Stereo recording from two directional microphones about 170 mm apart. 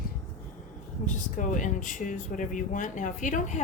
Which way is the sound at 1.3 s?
50° left (ahead or behind).